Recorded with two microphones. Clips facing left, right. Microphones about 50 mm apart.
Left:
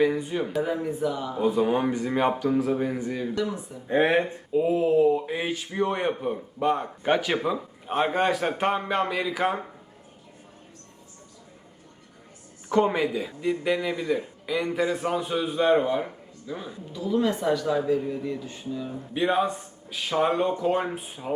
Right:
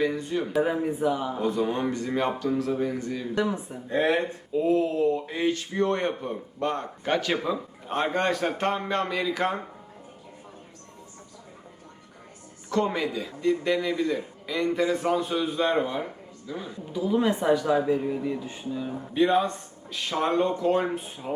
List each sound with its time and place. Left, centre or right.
0.0 s speech: centre
0.6 s speech: centre
1.4 s speech: centre
3.3 s speech: right
3.8 s speech: left; by 9.6 s centre
12.6 s speech: centre
16.9 s speech: centre
19.1 s speech: centre